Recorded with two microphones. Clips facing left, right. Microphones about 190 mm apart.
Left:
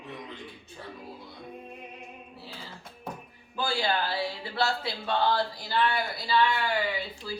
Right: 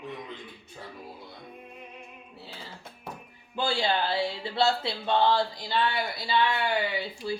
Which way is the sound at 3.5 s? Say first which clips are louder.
Right 1 dB; 25° right (ahead or behind).